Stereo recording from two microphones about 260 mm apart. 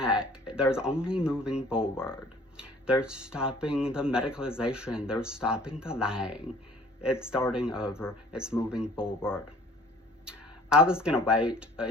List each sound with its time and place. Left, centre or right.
0.0 s speech: centre
7.5 s speech: centre
10.2 s speech: centre